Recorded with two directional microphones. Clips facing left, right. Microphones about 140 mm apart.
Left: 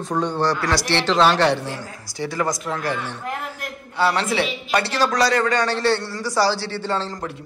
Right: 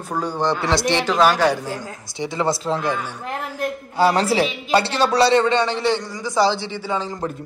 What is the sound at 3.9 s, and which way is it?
A man's voice, 40° right (ahead or behind).